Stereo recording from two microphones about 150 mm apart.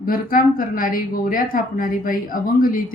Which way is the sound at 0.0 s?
70° left (ahead or behind).